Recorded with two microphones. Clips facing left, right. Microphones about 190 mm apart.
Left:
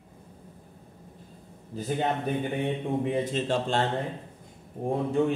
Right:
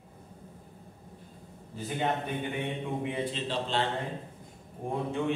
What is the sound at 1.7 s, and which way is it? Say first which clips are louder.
Speech: left 4 dB; 40° left (ahead or behind).